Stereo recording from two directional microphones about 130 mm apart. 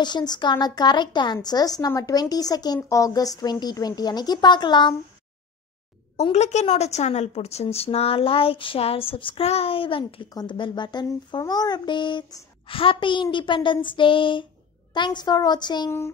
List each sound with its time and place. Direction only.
0.0 s a woman's voice: 35° left (ahead or behind)
6.3 s a woman's voice: 60° left (ahead or behind); by 15.9 s 35° left (ahead or behind)